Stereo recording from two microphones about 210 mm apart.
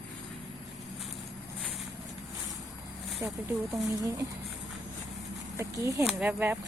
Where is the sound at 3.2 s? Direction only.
15° right (ahead or behind).